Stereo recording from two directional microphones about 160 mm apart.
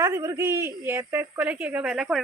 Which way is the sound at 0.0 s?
20° right (ahead or behind).